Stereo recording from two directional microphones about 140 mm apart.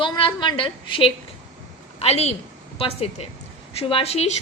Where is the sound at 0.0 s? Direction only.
35° left (ahead or behind).